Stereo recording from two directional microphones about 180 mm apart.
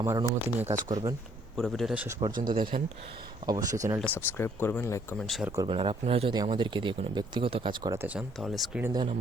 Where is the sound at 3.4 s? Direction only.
20° right (ahead or behind).